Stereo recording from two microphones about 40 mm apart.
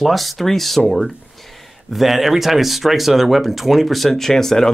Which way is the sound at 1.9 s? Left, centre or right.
Centre.